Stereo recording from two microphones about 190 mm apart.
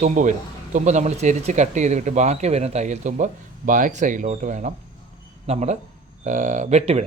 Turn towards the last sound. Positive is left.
turn(degrees=-35)  # may be behind; listen again after turning